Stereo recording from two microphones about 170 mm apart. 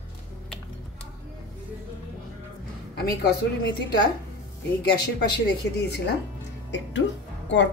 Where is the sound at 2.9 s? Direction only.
70° left (ahead or behind).